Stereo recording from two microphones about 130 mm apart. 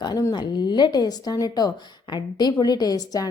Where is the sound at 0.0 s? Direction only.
30° left (ahead or behind).